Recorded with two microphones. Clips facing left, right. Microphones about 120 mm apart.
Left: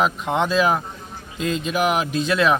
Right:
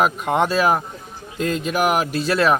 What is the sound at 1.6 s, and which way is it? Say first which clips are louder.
Speech: right 1 dB; 5° right (ahead or behind).